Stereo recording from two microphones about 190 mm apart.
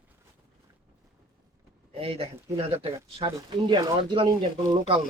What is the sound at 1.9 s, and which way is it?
Speech, 30° right (ahead or behind).